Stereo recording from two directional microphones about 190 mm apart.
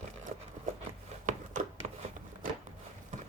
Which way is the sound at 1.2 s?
40° right (ahead or behind).